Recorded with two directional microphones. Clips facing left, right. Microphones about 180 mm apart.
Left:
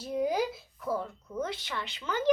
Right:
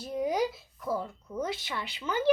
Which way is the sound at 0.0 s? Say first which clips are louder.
Even; centre (ahead or behind).